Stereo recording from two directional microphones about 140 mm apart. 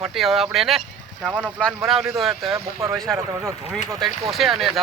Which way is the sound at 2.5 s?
20° right (ahead or behind).